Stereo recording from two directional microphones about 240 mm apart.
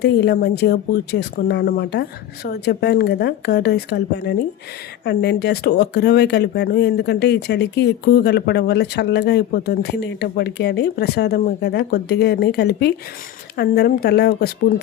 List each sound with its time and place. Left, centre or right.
0.0 s speech: left